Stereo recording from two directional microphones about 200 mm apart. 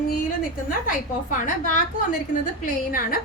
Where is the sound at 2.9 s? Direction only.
45° left (ahead or behind).